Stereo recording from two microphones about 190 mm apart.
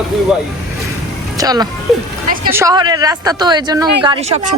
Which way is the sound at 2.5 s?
15° right (ahead or behind).